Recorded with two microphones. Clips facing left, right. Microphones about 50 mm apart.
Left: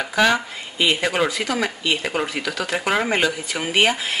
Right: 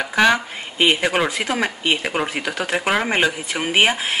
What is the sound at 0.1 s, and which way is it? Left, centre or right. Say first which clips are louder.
Speech: right 2 dB; centre.